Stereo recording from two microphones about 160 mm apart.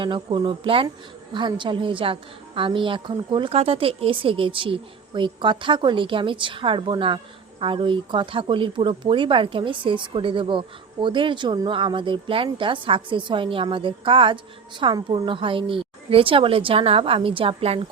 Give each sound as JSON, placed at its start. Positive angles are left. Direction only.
{"t": 0.0, "sound": "speech", "side_deg": -30}